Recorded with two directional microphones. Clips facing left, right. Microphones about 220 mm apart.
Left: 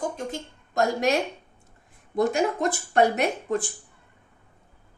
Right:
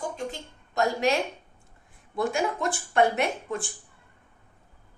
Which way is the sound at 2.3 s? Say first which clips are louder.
Left 3 dB; 40° left (ahead or behind).